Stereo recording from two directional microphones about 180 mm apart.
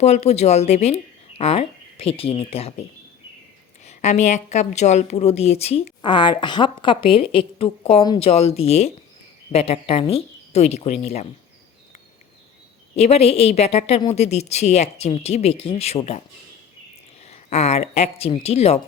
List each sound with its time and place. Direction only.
0.0 s a woman's voice: 35° left (ahead or behind)
3.8 s a woman's voice: 40° left (ahead or behind)
8.0 s a woman's voice: 25° left (ahead or behind)
8.3 s a woman's voice: 35° left (ahead or behind)
13.0 s a woman's voice: 35° left (ahead or behind)
17.2 s speech: 40° left (ahead or behind)